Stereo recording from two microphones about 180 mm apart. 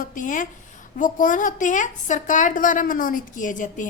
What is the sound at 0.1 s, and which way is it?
A woman's voice, 45° left (ahead or behind).